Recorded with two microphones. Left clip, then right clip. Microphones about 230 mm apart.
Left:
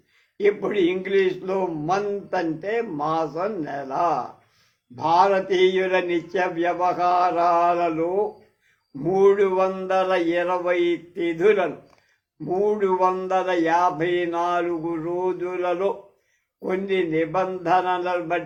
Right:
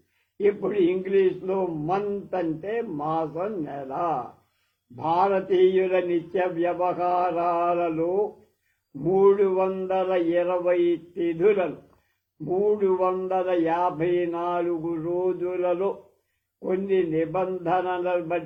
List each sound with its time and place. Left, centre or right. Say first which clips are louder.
0.4 s a man's voice: left 2 dB; left